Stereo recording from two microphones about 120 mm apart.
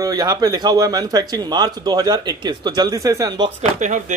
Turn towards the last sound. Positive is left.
turn(degrees=-90)